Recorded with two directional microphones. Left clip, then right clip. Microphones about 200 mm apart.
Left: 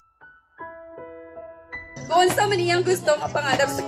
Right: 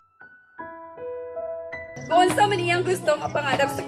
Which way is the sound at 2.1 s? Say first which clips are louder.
Even; 25° left (ahead or behind).